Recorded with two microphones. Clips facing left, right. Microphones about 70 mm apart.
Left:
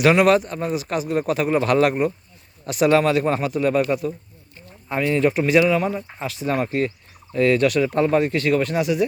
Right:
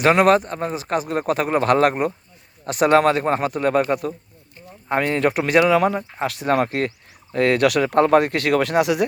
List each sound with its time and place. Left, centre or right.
0.0 s speech: right
4.9 s speech: right